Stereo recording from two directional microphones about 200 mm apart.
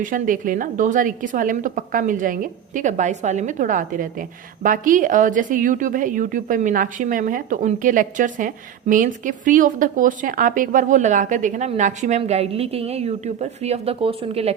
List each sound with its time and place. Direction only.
0.0 s a woman's voice: 40° right (ahead or behind)